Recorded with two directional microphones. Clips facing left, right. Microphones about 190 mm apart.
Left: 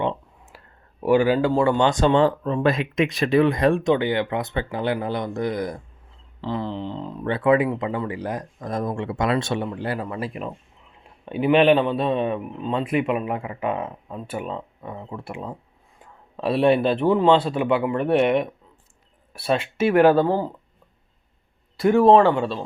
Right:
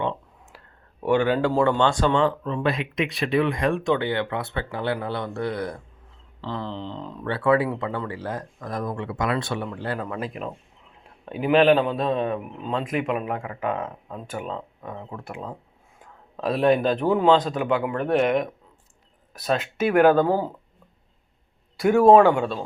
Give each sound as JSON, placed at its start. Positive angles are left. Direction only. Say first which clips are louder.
{"t": 0.0, "sound": "a sound", "louder": "left 2 dB", "side_deg": 15}
{"t": 1.0, "sound": "speech", "louder": "left 3 dB", "side_deg": 5}
{"t": 1.8, "sound": "speech", "louder": "left 2 dB", "side_deg": 20}
{"t": 2.1, "sound": "speech", "louder": "left 3 dB", "side_deg": 40}
{"t": 21.8, "sound": "speech", "louder": "even", "side_deg": 0}